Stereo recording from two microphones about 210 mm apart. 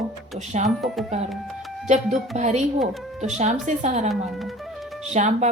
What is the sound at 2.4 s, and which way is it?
Speech, 35° right (ahead or behind).